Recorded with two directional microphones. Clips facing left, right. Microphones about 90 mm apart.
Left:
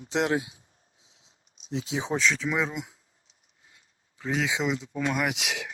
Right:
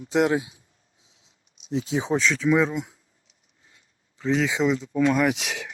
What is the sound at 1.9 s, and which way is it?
Speech, 35° right (ahead or behind).